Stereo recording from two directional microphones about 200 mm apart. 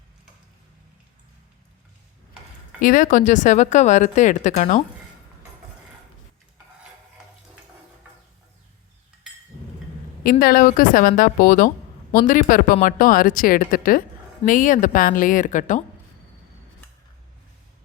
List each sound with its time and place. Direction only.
2.8 s speech: 40° left (ahead or behind)
10.2 s a woman's voice: 45° left (ahead or behind)